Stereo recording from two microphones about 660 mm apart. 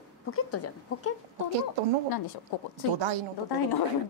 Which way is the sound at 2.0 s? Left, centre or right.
Left.